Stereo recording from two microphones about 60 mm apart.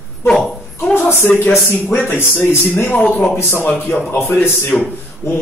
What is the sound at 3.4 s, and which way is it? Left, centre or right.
Speech, left.